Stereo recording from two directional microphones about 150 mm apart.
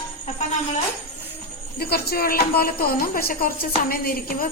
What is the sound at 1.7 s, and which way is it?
Speech, 90° left.